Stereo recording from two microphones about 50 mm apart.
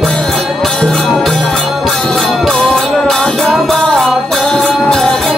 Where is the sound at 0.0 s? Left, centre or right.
Centre.